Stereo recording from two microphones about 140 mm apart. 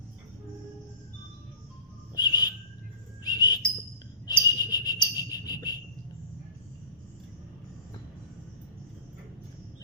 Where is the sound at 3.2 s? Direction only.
30° left (ahead or behind).